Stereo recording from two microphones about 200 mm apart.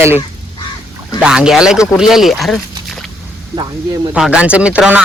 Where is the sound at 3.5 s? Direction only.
20° right (ahead or behind).